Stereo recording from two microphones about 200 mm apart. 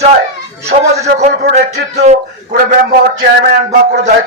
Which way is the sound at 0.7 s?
50° right (ahead or behind).